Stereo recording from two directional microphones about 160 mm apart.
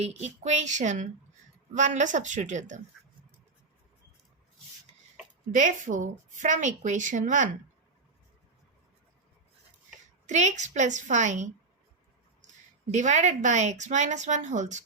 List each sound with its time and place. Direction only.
0.0 s a woman's voice: 45° right (ahead or behind)
5.5 s a woman's voice: 50° right (ahead or behind)
10.2 s a woman's voice: 50° right (ahead or behind)
12.9 s a woman's voice: 50° right (ahead or behind)